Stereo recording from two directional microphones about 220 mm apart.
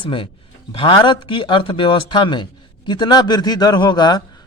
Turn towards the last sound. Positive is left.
turn(degrees=20)  # may be behind; listen again after turning